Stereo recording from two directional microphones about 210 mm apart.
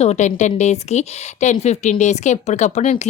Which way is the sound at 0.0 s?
30° left (ahead or behind).